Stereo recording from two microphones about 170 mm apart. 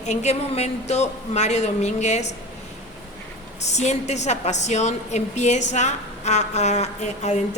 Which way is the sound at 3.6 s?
40° left (ahead or behind).